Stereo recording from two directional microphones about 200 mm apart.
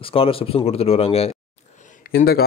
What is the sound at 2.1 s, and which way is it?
Speech, 50° left (ahead or behind).